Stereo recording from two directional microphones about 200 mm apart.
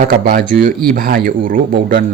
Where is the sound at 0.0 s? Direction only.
45° right (ahead or behind).